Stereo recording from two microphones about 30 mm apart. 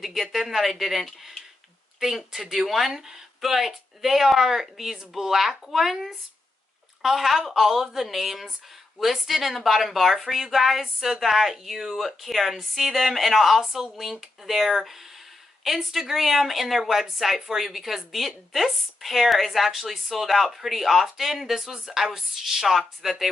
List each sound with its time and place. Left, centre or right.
0.0 s speech: centre
13.7 s speech: right
14.2 s speech: centre